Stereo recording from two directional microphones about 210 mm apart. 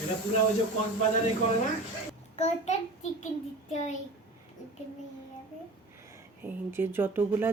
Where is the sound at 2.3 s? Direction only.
30° left (ahead or behind).